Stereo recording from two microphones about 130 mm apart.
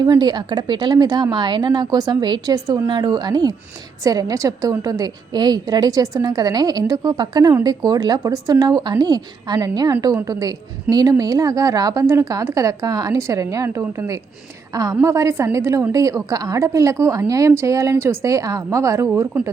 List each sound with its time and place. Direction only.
0.0 s a woman's voice: 35° right (ahead or behind)